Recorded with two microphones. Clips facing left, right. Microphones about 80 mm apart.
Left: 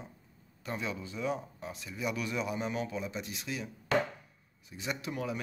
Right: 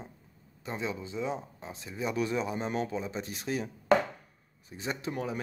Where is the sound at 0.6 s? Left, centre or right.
Right.